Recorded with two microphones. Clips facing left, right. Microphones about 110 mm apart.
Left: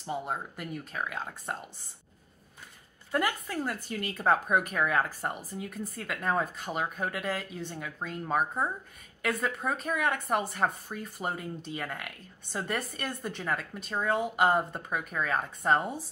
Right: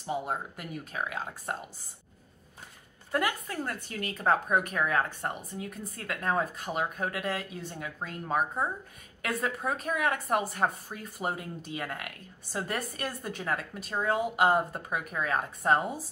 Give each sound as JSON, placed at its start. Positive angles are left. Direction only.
{"t": 0.0, "sound": "a woman's voice", "side_deg": -5}
{"t": 3.1, "sound": "a woman's voice", "side_deg": 0}